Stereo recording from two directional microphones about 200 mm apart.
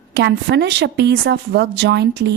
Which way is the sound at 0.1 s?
60° right (ahead or behind).